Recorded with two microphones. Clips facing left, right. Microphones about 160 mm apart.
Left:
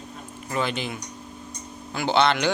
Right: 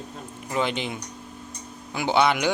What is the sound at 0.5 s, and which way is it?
Speech, 20° right (ahead or behind).